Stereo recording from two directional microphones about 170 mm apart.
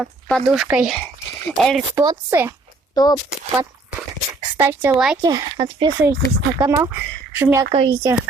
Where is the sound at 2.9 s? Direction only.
20° left (ahead or behind).